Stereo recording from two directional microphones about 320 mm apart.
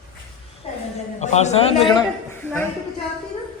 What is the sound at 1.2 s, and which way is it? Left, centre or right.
A man's voice, left.